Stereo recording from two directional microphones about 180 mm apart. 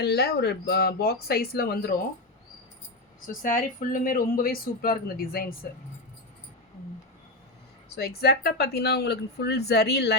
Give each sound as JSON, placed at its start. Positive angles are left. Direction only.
{"t": 0.0, "sound": "a woman's voice", "side_deg": 65}
{"t": 3.4, "sound": "speech", "side_deg": 45}
{"t": 7.9, "sound": "a woman's voice", "side_deg": 60}